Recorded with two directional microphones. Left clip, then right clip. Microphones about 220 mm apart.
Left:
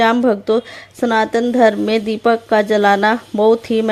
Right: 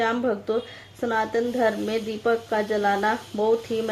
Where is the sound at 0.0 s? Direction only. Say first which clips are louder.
Left 10 dB; 45° left (ahead or behind).